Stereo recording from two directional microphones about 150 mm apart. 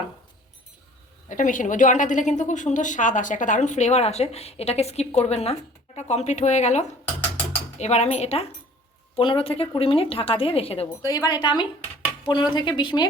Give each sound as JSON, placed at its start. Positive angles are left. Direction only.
{"t": 1.3, "sound": "a woman's voice", "side_deg": 60}
{"t": 10.8, "sound": "a woman's voice", "side_deg": 25}